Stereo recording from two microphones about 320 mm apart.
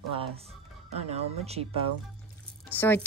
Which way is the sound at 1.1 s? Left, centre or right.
Centre.